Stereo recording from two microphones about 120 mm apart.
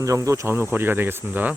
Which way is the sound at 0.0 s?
25° right (ahead or behind).